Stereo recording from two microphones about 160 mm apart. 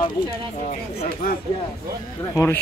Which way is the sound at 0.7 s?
55° left (ahead or behind).